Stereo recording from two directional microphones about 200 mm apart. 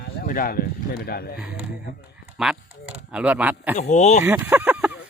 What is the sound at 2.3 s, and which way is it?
Speech, 5° right (ahead or behind).